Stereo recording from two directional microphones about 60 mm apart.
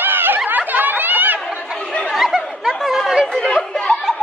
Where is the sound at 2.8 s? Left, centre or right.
Centre.